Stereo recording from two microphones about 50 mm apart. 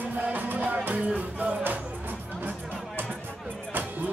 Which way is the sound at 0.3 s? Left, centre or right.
Right.